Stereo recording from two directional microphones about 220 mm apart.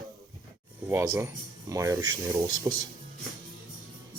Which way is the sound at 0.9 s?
15° right (ahead or behind).